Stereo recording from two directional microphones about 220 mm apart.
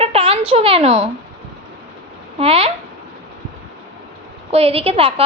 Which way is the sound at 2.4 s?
25° right (ahead or behind).